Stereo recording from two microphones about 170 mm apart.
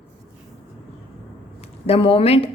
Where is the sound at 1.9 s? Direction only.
35° left (ahead or behind).